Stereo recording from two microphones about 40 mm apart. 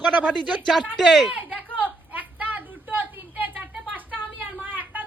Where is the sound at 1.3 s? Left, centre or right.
Right.